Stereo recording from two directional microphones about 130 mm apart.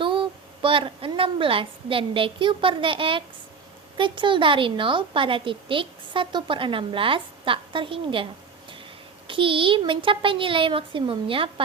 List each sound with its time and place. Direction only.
0.0 s a woman's voice: 40° right (ahead or behind)